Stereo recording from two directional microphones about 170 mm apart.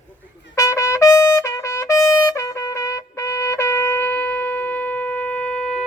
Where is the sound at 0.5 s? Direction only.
20° left (ahead or behind).